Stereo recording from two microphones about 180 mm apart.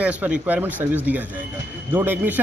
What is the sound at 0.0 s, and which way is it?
Speech, 10° right (ahead or behind).